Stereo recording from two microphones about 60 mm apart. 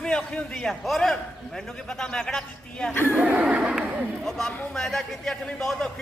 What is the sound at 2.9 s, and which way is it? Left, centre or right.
Speech, left.